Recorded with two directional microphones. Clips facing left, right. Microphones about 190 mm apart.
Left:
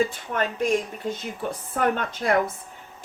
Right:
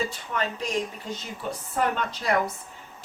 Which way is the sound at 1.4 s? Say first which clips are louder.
Left 2 dB; 50° left (ahead or behind).